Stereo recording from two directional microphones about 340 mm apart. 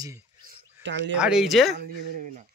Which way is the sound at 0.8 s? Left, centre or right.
Right.